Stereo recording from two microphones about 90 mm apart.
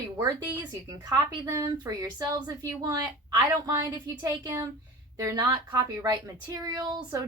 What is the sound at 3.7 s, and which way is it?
A woman's voice, 35° right (ahead or behind).